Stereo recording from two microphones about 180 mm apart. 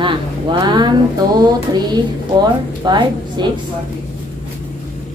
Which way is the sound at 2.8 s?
25° right (ahead or behind).